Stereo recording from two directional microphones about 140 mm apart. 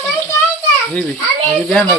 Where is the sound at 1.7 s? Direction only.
5° left (ahead or behind).